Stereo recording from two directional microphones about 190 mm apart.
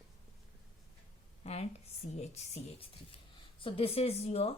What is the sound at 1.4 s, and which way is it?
A woman's voice, 35° left (ahead or behind).